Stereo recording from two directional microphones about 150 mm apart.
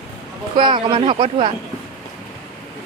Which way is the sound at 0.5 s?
35° right (ahead or behind).